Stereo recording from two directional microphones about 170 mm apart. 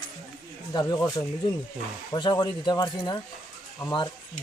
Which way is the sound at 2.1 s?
25° left (ahead or behind).